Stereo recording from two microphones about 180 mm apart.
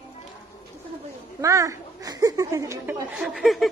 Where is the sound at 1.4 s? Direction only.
15° right (ahead or behind).